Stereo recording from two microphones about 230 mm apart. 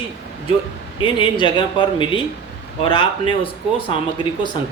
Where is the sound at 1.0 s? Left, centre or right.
Left.